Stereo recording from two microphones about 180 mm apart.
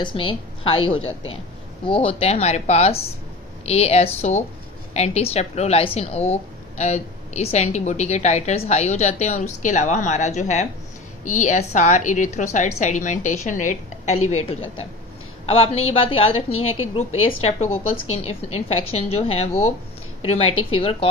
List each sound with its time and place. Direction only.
0.0 s a woman's voice: 30° left (ahead or behind)
2.0 s a woman's voice: 35° left (ahead or behind)